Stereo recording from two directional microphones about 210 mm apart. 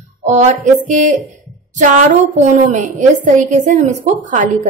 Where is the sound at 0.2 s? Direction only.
35° right (ahead or behind).